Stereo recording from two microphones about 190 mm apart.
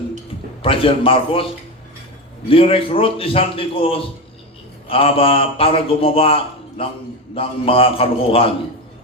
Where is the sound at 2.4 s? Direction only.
30° left (ahead or behind).